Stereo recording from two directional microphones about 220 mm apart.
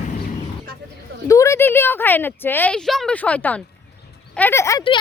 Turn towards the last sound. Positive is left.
turn(degrees=20)  # may be behind; listen again after turning